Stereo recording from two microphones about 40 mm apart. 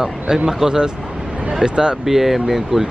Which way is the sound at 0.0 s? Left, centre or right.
Centre.